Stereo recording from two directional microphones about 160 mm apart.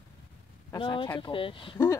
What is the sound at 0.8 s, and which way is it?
Speech, 30° left (ahead or behind).